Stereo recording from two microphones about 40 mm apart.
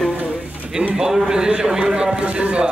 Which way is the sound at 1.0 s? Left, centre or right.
Centre.